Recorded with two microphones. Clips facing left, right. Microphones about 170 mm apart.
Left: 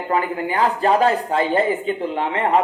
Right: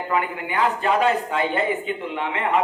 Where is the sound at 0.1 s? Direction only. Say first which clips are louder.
Left 4 dB; 35° left (ahead or behind).